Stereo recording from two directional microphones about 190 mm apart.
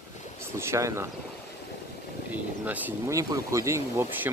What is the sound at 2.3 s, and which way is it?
Speech, 10° right (ahead or behind).